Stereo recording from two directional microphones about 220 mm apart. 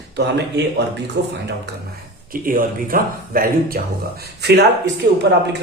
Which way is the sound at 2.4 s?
40° right (ahead or behind).